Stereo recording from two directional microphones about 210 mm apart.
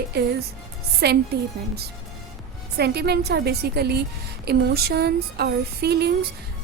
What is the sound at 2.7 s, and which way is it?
A woman's voice, 50° right (ahead or behind).